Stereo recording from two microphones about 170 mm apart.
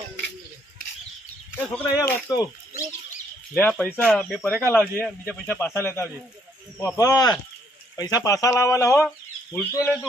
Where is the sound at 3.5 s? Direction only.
5° left (ahead or behind).